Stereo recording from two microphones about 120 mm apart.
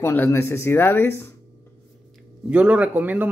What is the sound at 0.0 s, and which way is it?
Speech, 20° left (ahead or behind).